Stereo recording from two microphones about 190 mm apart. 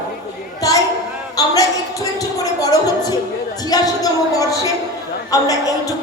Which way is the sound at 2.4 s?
20° left (ahead or behind).